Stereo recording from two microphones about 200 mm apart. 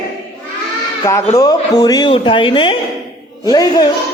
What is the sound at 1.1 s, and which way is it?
Speech, 15° left (ahead or behind).